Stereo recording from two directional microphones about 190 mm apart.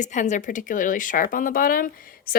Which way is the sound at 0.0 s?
40° left (ahead or behind).